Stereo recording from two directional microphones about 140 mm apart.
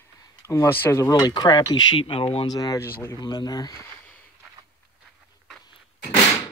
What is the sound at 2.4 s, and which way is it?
Speech, 30° left (ahead or behind).